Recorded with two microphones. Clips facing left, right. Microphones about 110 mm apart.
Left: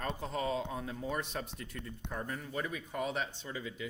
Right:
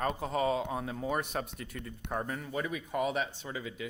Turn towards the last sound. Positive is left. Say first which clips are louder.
# right 2 dB
turn(degrees=-65)  # may be behind; listen again after turning